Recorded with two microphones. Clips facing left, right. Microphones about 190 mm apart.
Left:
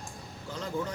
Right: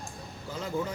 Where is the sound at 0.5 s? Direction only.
5° right (ahead or behind).